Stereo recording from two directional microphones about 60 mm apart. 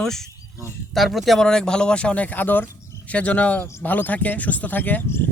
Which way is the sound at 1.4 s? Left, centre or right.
Centre.